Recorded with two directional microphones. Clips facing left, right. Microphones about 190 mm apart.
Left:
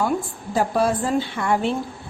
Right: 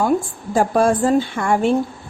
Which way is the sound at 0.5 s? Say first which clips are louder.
Right 4 dB; 50° right (ahead or behind).